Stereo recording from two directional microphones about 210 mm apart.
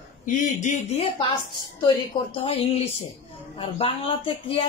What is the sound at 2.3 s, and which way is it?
Speech, 30° left (ahead or behind).